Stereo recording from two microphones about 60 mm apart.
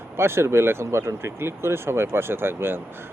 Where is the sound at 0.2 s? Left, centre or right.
Right.